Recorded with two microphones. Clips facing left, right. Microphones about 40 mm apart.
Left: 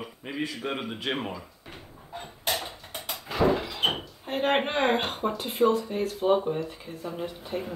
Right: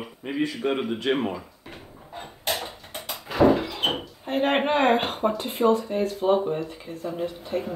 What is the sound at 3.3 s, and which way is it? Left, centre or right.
Door, centre.